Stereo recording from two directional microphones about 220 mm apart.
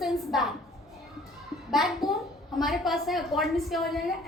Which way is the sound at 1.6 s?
Centre (ahead or behind).